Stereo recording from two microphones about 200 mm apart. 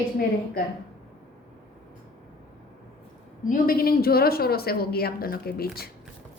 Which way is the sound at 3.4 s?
45° left (ahead or behind).